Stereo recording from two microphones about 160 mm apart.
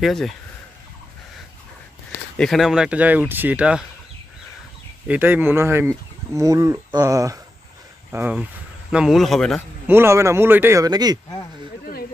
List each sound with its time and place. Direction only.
0.0 s speech: centre (ahead or behind)
2.3 s speech: centre (ahead or behind)
5.0 s speech: 10° right (ahead or behind)
9.8 s speech: 15° right (ahead or behind)